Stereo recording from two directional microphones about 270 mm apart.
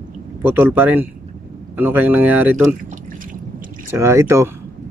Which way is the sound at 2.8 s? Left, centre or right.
Right.